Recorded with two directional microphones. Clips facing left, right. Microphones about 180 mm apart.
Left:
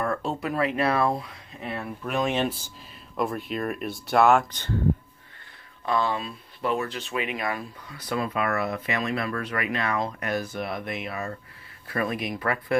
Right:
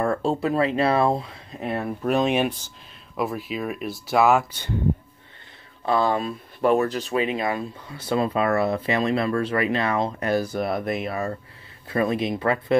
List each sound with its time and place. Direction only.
0.0 s speech: 30° right (ahead or behind)
1.6 s speech: 40° right (ahead or behind)
2.2 s speech: 10° right (ahead or behind)
5.9 s speech: 35° right (ahead or behind)
6.1 s speech: 50° right (ahead or behind)
11.9 s speech: 25° right (ahead or behind)